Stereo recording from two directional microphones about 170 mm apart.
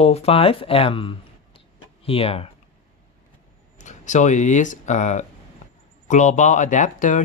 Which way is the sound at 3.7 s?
45° left (ahead or behind).